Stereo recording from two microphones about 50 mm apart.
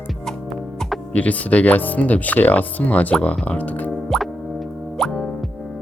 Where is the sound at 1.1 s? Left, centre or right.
Left.